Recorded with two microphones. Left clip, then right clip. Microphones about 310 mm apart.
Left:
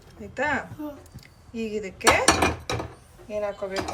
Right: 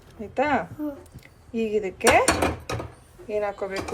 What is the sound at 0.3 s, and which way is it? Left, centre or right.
Chopping, centre.